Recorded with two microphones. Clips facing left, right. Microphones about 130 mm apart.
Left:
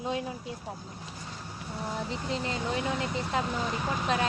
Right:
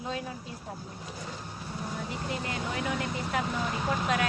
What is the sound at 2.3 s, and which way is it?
Speech, 25° left (ahead or behind).